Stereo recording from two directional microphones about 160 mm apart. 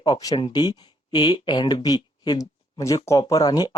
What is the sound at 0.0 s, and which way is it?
Speech, 25° left (ahead or behind).